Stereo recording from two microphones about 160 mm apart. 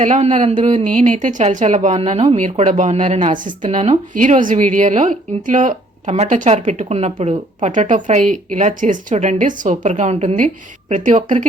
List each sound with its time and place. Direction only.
0.0 s speech: 50° right (ahead or behind)